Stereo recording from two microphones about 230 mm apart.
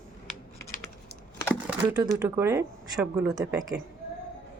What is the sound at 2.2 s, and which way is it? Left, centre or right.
Speech, centre.